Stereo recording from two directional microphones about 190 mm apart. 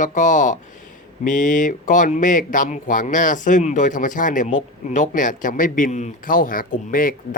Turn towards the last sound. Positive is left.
turn(degrees=45)  # may be behind; listen again after turning